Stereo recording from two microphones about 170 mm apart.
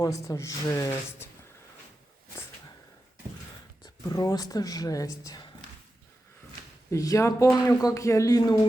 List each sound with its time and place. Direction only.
0.0 s a woman's voice: 20° left (ahead or behind)
4.0 s speech: 20° left (ahead or behind)
6.9 s speech: 20° left (ahead or behind)